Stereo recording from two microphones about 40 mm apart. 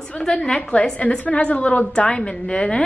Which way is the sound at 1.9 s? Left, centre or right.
Left.